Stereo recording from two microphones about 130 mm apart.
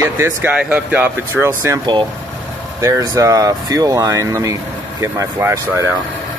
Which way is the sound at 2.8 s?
25° right (ahead or behind).